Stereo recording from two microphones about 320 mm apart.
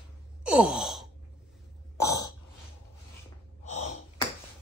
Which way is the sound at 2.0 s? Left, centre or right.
Centre.